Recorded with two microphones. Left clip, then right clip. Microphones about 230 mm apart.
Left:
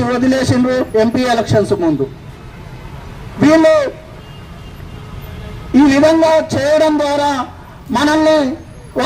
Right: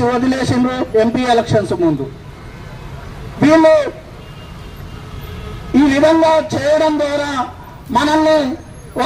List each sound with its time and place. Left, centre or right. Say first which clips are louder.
0.0 s a man's voice: left 1 dB; left
3.4 s a man's voice: even; left
5.7 s a man's voice: left 1 dB; left